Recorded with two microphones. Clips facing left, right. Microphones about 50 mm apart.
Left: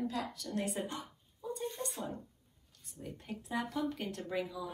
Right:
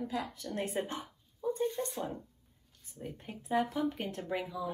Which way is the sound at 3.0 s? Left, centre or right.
Centre.